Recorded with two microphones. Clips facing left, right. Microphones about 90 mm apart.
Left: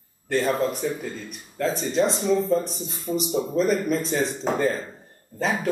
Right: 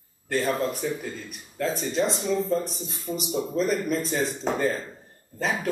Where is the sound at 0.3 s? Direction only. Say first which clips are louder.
Left 3 dB; 5° left (ahead or behind).